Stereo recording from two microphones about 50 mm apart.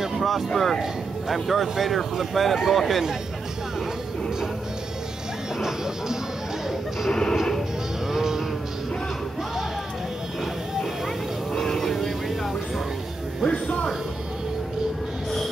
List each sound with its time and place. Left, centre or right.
0.0 s vehicle: centre
1.3 s speech: centre
5.6 s speech: centre
7.1 s speech: centre
8.1 s music: centre
11.5 s vehicle: centre
13.5 s music: left